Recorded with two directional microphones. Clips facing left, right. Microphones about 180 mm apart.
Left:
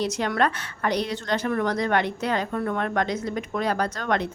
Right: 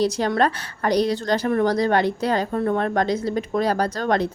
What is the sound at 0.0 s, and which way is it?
A woman's voice, 35° right (ahead or behind).